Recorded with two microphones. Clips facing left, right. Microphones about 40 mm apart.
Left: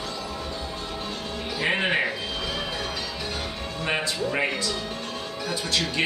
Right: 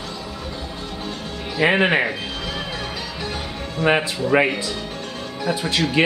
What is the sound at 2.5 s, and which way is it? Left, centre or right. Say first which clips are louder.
Music: right 2 dB; centre.